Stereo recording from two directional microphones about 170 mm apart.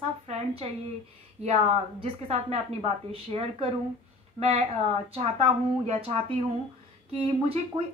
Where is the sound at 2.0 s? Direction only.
35° right (ahead or behind).